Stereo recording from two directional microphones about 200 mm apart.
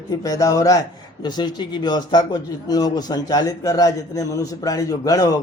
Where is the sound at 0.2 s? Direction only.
15° left (ahead or behind).